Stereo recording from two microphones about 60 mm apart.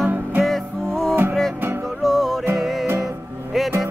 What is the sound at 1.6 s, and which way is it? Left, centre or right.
Music, right.